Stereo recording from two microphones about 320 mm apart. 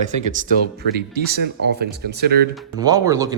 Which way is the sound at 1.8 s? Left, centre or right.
Right.